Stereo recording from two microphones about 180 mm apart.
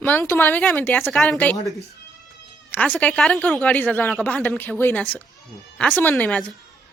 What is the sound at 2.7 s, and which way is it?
Speech, 10° left (ahead or behind).